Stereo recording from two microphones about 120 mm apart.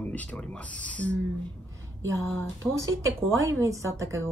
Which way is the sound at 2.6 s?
25° right (ahead or behind).